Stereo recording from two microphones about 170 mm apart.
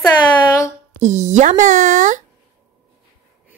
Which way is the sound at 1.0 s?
45° right (ahead or behind).